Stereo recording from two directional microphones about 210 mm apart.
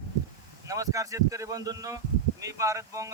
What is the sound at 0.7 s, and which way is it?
Speech, 15° right (ahead or behind).